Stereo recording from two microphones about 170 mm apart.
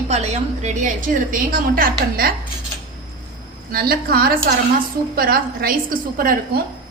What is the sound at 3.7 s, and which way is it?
A woman's voice, 65° right (ahead or behind).